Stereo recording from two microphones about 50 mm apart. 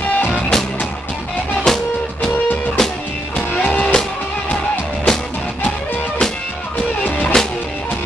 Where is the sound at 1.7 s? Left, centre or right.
Centre.